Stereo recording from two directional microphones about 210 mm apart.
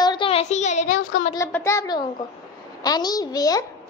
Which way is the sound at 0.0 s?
20° left (ahead or behind).